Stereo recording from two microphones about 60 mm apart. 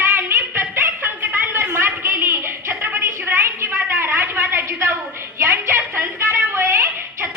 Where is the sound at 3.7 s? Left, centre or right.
Right.